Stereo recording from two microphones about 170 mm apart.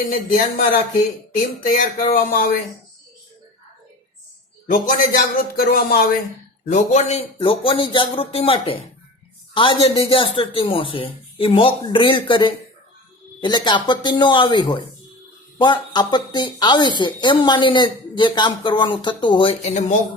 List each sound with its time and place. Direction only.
0.1 s speech: 50° left (ahead or behind)
1.7 s speech: 50° left (ahead or behind)
4.6 s a man's voice: 55° left (ahead or behind)
6.7 s a woman's voice: 45° left (ahead or behind)